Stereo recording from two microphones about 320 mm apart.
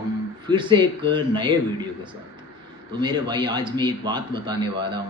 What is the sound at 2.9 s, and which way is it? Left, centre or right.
Speech, centre.